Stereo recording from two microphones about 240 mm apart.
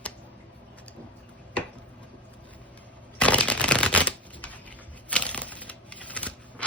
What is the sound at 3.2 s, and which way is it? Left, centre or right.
Shuffling cards, centre.